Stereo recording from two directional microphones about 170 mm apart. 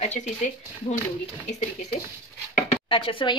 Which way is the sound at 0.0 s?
45° left (ahead or behind).